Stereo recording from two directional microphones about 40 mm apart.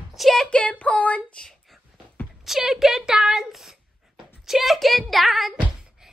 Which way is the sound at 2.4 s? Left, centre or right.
Centre.